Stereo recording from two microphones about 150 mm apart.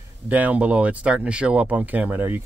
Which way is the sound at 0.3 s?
10° right (ahead or behind).